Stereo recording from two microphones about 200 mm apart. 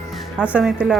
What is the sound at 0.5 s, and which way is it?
Speech, 5° right (ahead or behind).